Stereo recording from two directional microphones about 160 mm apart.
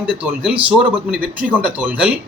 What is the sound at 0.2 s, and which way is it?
Speech, 10° right (ahead or behind).